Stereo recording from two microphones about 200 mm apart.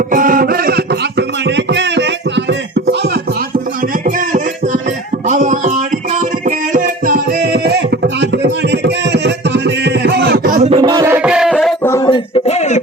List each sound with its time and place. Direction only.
0.1 s music: 45° right (ahead or behind)
1.5 s music: 60° right (ahead or behind)
4.0 s a sound: 40° right (ahead or behind)
6.1 s music: 40° right (ahead or behind)
10.7 s music: 25° right (ahead or behind); by 12.0 s 10° left (ahead or behind)
12.0 s music: 25° left (ahead or behind)